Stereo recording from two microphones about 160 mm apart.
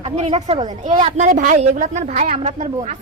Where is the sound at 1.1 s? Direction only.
55° right (ahead or behind).